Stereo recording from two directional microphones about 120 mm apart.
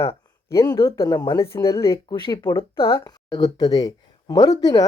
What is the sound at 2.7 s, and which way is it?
Speech, 30° left (ahead or behind).